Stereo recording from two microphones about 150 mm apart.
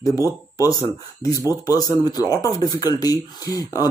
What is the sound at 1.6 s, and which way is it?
Speech, 25° left (ahead or behind).